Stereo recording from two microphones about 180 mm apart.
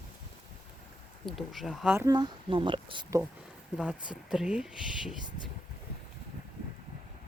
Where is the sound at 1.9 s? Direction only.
20° right (ahead or behind).